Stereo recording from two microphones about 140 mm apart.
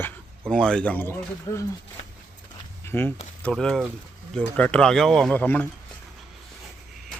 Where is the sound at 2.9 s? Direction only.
15° left (ahead or behind).